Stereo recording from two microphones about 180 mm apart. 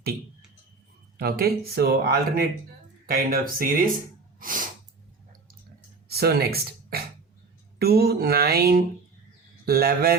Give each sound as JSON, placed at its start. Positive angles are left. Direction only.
{"t": 1.1, "sound": "speech", "side_deg": -55}
{"t": 4.4, "sound": "sneeze", "side_deg": -50}
{"t": 6.1, "sound": "speech", "side_deg": -60}